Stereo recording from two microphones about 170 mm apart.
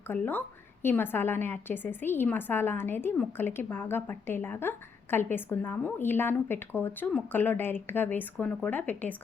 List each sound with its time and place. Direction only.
0.1 s a woman's voice: 10° left (ahead or behind)